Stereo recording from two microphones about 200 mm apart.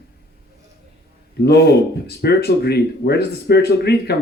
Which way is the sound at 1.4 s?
55° left (ahead or behind).